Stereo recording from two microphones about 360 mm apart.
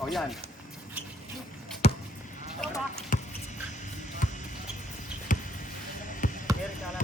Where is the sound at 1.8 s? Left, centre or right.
Centre.